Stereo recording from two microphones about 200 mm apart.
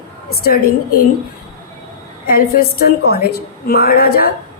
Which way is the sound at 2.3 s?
50° left (ahead or behind).